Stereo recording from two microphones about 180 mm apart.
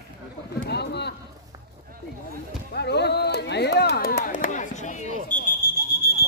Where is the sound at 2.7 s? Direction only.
70° left (ahead or behind); by 5.1 s 40° left (ahead or behind).